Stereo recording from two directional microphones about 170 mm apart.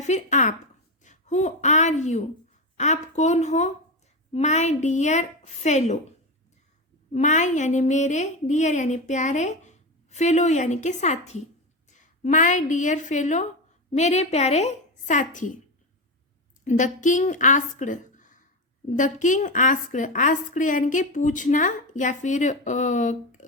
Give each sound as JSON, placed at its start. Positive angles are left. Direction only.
{"t": 0.0, "sound": "a woman's voice", "side_deg": 45}
{"t": 7.1, "sound": "a woman's voice", "side_deg": 45}
{"t": 16.6, "sound": "a woman's voice", "side_deg": 45}